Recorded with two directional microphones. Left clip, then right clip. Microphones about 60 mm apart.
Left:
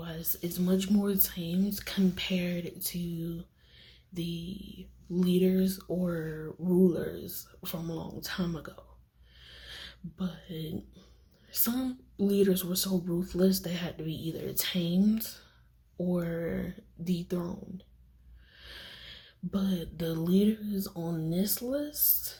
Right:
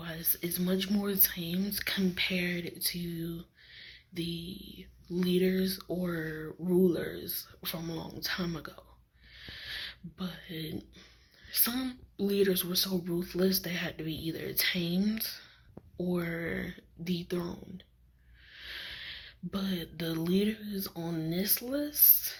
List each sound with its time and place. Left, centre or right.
0.0 s a sound: left
0.4 s speech: left
5.9 s speech: centre
6.1 s speech: centre
6.9 s a woman's voice: left
16.0 s speech: left